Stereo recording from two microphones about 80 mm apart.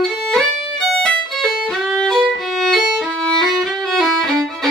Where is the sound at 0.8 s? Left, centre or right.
Centre.